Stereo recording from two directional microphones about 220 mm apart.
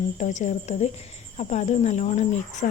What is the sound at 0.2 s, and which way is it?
A woman's voice, 35° left (ahead or behind).